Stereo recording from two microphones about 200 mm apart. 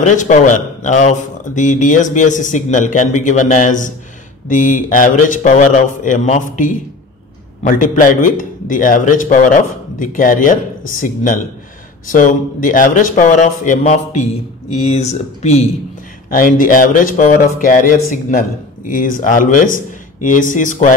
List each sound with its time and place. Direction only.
0.0 s speech: 40° left (ahead or behind)